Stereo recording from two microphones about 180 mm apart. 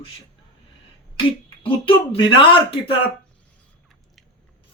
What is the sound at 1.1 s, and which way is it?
Speech, 30° left (ahead or behind).